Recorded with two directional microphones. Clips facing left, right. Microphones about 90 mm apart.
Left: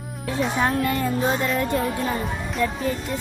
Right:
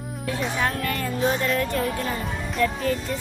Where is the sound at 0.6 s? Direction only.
20° left (ahead or behind).